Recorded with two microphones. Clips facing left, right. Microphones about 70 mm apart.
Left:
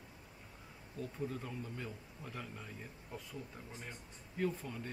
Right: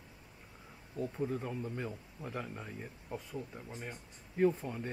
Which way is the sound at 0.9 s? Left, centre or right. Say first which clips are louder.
Right 6 dB; right.